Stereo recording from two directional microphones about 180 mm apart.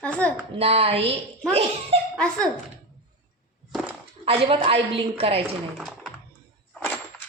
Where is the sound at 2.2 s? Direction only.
5° left (ahead or behind).